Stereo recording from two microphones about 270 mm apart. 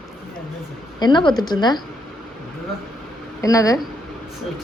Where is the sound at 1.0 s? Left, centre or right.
Centre.